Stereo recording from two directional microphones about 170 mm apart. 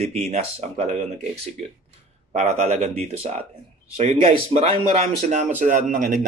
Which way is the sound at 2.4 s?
45° right (ahead or behind).